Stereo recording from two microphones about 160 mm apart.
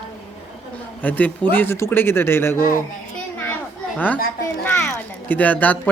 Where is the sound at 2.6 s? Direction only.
60° left (ahead or behind).